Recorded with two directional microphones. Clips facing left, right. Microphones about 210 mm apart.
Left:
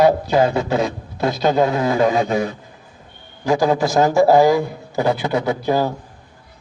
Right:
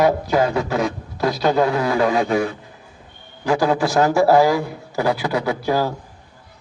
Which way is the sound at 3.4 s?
15° left (ahead or behind).